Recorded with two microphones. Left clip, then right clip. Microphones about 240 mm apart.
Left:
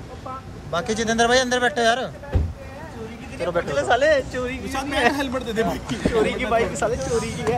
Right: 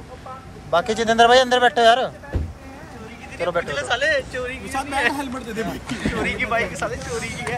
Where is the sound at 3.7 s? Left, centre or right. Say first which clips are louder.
Left 6 dB; left.